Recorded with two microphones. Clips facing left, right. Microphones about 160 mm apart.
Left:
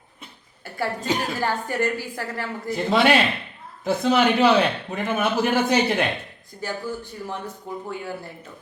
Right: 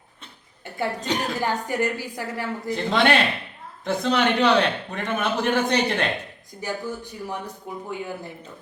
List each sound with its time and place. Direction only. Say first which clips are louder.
1.0 s a man's voice: left 3 dB; 5° left (ahead or behind)
1.4 s speech: even; 15° right (ahead or behind)
2.6 s a man's voice: left 2 dB; 5° left (ahead or behind)
6.6 s speech: even; 15° right (ahead or behind)